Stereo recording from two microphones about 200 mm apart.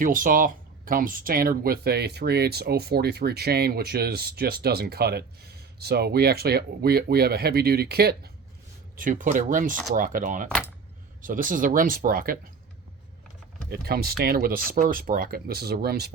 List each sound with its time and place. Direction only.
0.0 s speech: 45° right (ahead or behind)
13.7 s speech: 50° right (ahead or behind)